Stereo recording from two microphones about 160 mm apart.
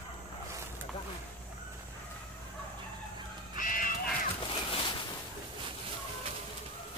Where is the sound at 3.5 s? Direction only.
60° left (ahead or behind).